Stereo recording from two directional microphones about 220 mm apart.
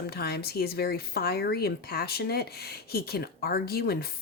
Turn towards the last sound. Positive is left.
turn(degrees=45)  # may be behind; listen again after turning